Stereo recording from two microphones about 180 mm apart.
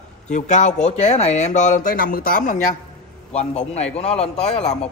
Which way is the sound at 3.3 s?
35° left (ahead or behind).